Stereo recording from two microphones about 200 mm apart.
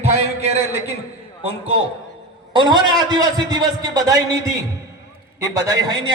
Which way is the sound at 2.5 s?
20° right (ahead or behind).